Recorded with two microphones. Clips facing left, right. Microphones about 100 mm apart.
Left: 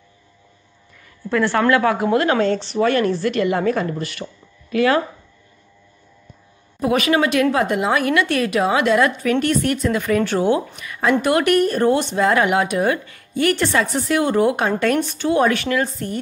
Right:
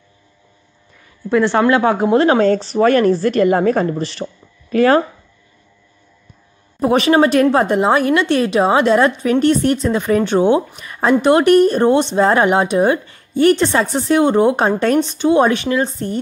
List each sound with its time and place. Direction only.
1.3 s speech: 20° right (ahead or behind); by 3.8 s 40° right (ahead or behind)
3.8 s speech: 30° right (ahead or behind)
6.8 s speech: 30° right (ahead or behind)
10.8 s speech: 35° right (ahead or behind)